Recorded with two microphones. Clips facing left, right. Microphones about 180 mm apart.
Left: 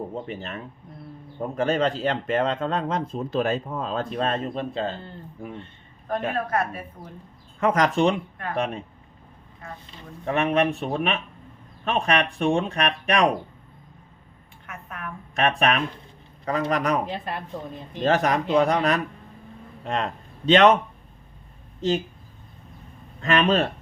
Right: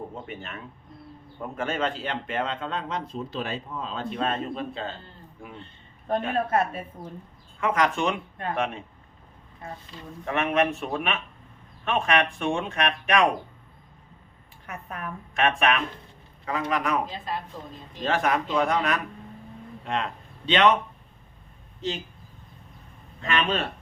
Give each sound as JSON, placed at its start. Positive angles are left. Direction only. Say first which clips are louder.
{"t": 0.3, "sound": "a man's voice", "louder": "left 4 dB", "side_deg": 35}
{"t": 6.3, "sound": "a woman's voice", "louder": "right 1 dB", "side_deg": -25}
{"t": 7.6, "sound": "a man's voice", "louder": "left 4 dB", "side_deg": 40}
{"t": 10.2, "sound": "a man's voice", "louder": "left 2 dB", "side_deg": 35}
{"t": 14.7, "sound": "a woman's voice", "louder": "right 1 dB", "side_deg": -35}
{"t": 15.4, "sound": "a man's voice", "louder": "left 1 dB", "side_deg": 35}
{"t": 17.1, "sound": "a woman's voice", "louder": "left 2 dB", "side_deg": 65}
{"t": 18.0, "sound": "a man's voice", "louder": "left 3 dB", "side_deg": 40}
{"t": 21.8, "sound": "speech", "louder": "left 8 dB", "side_deg": 45}
{"t": 23.2, "sound": "a man's voice", "louder": "left 6 dB", "side_deg": 40}